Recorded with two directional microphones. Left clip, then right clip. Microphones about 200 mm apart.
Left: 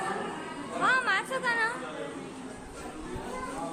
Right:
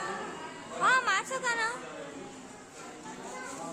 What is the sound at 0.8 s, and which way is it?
Speech, 10° right (ahead or behind).